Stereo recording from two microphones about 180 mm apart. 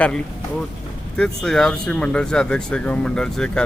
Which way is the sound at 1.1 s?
5° left (ahead or behind).